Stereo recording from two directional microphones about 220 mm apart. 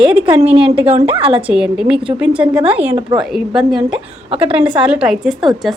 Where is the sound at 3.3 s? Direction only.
Centre (ahead or behind).